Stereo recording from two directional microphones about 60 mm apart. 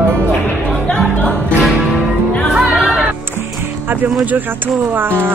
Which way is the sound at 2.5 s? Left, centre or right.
Centre.